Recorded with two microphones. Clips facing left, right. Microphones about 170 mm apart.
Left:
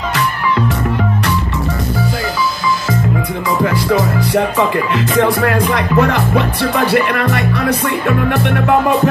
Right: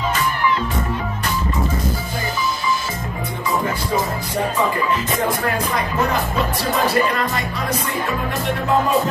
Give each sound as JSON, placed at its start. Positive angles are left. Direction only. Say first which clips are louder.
{"t": 3.6, "sound": "music", "louder": "left 7 dB", "side_deg": 85}